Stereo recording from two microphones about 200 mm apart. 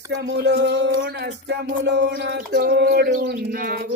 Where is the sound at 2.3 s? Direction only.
55° right (ahead or behind).